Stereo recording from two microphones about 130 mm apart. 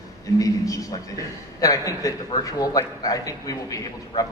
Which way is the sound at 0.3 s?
25° left (ahead or behind).